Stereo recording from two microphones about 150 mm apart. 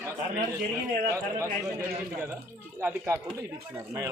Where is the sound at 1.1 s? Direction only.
20° right (ahead or behind).